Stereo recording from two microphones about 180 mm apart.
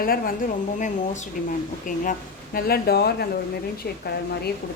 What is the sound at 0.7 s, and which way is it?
A woman's voice, 45° left (ahead or behind).